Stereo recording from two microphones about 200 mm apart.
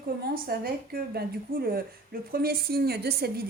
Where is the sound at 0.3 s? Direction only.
50° right (ahead or behind).